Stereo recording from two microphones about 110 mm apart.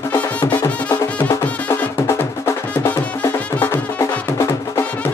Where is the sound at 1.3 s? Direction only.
25° left (ahead or behind).